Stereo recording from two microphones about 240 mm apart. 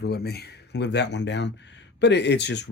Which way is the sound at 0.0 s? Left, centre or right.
Left.